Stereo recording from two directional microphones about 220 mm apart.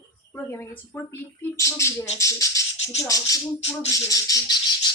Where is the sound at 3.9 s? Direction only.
15° left (ahead or behind).